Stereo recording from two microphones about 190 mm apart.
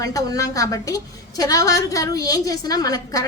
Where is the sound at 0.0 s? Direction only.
20° left (ahead or behind).